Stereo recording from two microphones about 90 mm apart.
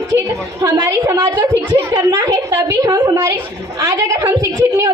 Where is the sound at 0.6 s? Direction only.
45° right (ahead or behind).